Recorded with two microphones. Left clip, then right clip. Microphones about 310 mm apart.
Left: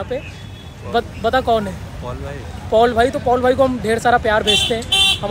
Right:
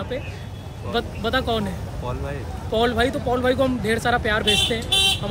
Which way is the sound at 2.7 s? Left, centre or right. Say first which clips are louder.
Left 7 dB; centre.